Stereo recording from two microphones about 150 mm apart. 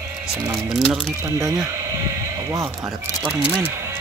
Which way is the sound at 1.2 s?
20° right (ahead or behind).